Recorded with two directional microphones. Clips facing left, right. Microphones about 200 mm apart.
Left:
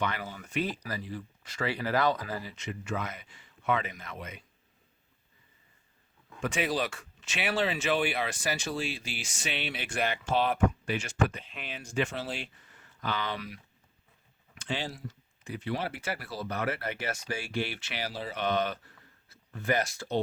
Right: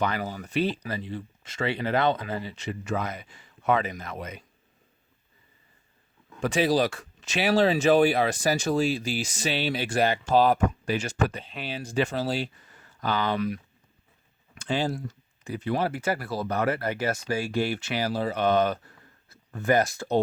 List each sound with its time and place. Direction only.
0.0 s speech: 40° right (ahead or behind)
6.4 s speech: 35° right (ahead or behind)
14.6 s speech: 45° right (ahead or behind)